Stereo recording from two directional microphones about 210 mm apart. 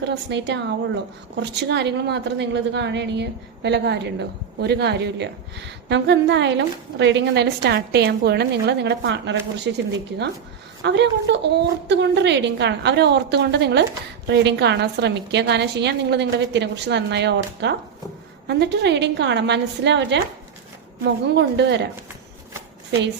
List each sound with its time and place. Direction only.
0.0 s a woman's voice: 55° right (ahead or behind)